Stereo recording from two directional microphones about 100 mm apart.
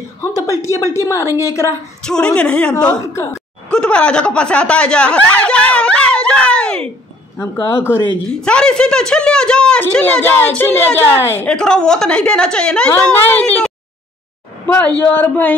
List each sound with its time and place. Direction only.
0.2 s a sound: 30° left (ahead or behind)
0.9 s a woman's voice: 30° left (ahead or behind)
2.0 s speech: 10° left (ahead or behind)
2.9 s a woman's voice: 30° left (ahead or behind)
3.7 s speech: 10° left (ahead or behind)
7.3 s a woman's voice: 25° left (ahead or behind)
8.3 s speech: 10° left (ahead or behind)
14.7 s speech: 15° left (ahead or behind)